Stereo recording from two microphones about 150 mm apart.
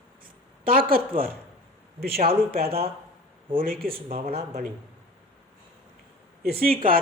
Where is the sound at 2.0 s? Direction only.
90° right.